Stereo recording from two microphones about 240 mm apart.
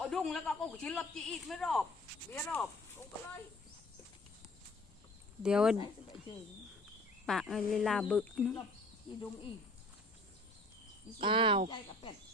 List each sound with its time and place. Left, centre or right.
0.0 s speech: centre
5.4 s speech: centre
7.3 s speech: centre
11.2 s speech: right